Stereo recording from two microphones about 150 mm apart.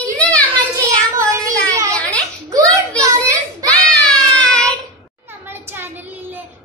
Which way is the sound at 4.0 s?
5° left (ahead or behind).